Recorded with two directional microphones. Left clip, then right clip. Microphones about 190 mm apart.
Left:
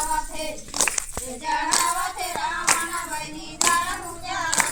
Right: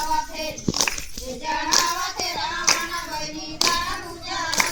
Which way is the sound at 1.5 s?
15° left (ahead or behind).